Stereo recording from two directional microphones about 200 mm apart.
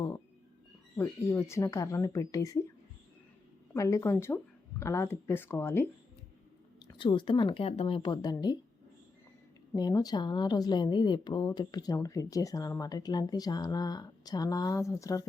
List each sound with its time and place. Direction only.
0.9 s speech: 15° left (ahead or behind)
3.8 s speech: 15° left (ahead or behind)
6.8 s speech: 25° left (ahead or behind)
9.7 s speech: 20° left (ahead or behind)